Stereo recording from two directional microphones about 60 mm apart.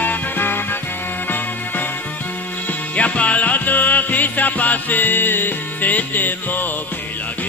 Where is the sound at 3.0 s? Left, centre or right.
Left.